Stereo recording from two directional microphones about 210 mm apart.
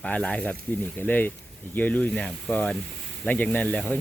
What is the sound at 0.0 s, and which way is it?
Speech, 5° left (ahead or behind).